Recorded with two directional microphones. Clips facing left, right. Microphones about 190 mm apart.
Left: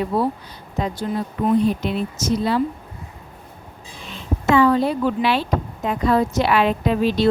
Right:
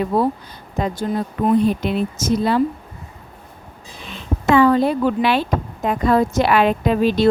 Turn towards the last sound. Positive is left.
turn(degrees=-50)  # may be behind; listen again after turning